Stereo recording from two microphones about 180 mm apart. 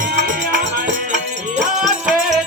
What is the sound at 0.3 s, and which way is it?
Music, 45° right (ahead or behind).